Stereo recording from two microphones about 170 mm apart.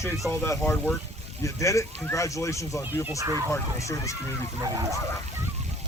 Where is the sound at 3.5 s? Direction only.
20° left (ahead or behind).